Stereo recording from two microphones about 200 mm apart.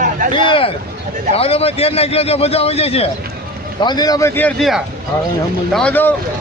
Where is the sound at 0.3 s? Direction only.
25° left (ahead or behind).